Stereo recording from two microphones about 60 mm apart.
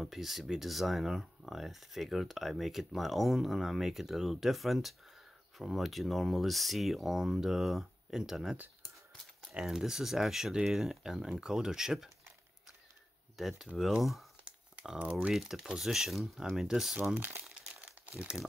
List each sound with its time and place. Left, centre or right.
0.0 s speech: centre
13.4 s speech: centre
15.0 s speech: right
15.2 s speech: centre
17.1 s crumpling: right